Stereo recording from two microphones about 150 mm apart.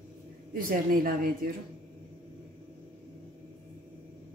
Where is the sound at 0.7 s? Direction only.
70° right (ahead or behind).